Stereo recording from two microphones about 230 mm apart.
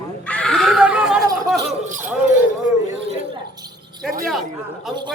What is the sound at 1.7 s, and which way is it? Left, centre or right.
Speech, right.